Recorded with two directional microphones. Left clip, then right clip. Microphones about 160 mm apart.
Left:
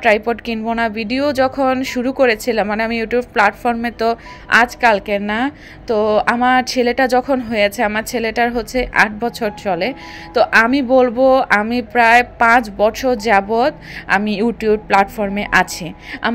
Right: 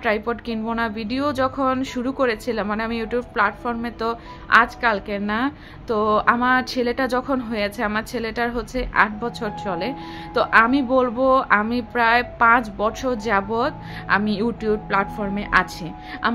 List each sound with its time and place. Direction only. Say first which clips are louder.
0.0 s speech: left 8 dB; 15° left (ahead or behind)